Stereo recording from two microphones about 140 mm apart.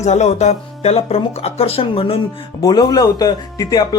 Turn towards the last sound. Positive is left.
turn(degrees=30)  # may be behind; listen again after turning